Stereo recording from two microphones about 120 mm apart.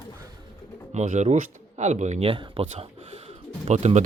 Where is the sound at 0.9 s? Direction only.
75° right (ahead or behind).